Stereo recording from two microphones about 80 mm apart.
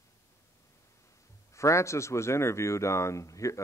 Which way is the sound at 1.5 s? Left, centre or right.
Left.